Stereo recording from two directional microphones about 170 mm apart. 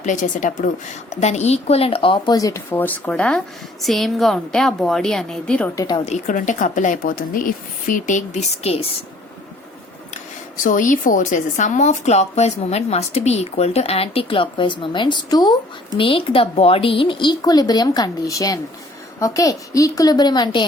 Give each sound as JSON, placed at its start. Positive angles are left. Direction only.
{"t": 0.0, "sound": "a woman's voice", "side_deg": 50}
{"t": 5.7, "sound": "speech", "side_deg": 25}
{"t": 6.1, "sound": "a woman's voice", "side_deg": 45}
{"t": 10.6, "sound": "a woman's voice", "side_deg": 50}